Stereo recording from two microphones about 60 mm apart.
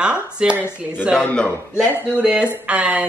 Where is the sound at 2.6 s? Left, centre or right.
Centre.